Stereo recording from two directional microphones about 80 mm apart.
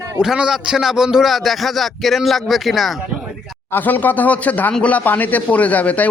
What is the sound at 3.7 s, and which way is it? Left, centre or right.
A man's voice, left.